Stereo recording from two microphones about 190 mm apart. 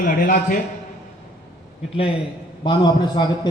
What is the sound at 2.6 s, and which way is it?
Speech, 20° left (ahead or behind).